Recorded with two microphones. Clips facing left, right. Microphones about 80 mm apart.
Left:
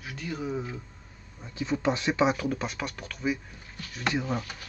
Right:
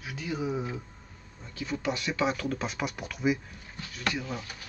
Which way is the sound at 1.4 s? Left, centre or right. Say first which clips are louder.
Left 5 dB; left.